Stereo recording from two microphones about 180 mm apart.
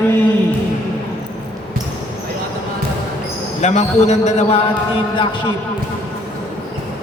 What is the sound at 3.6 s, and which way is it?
Speech, 40° left (ahead or behind).